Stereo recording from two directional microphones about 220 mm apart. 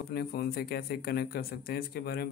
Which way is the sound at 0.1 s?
45° left (ahead or behind).